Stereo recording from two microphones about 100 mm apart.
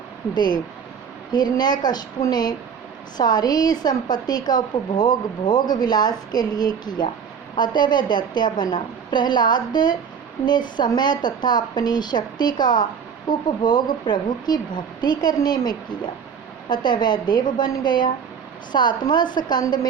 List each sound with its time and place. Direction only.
0.3 s a woman's voice: 45° left (ahead or behind)